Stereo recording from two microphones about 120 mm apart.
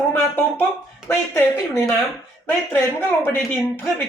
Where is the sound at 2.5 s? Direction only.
20° left (ahead or behind).